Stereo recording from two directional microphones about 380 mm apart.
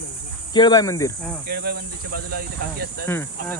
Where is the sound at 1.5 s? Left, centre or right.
Right.